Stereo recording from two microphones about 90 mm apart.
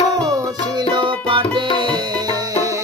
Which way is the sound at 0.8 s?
60° right (ahead or behind).